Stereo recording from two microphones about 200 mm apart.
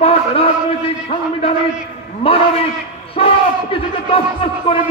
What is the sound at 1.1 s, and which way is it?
Speech, 30° left (ahead or behind).